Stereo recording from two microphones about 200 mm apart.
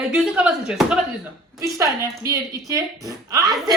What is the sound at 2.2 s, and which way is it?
A woman's voice, 15° right (ahead or behind).